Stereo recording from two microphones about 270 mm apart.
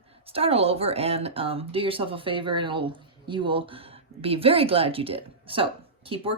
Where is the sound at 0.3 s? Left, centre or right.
Right.